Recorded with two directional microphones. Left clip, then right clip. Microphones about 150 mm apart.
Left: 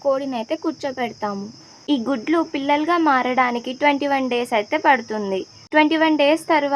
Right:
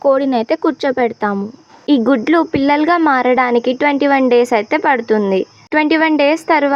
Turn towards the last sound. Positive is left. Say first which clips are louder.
# right 5 dB
turn(degrees=-30)  # may be behind; listen again after turning